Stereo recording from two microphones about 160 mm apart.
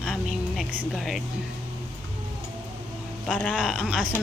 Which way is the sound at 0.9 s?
Centre (ahead or behind).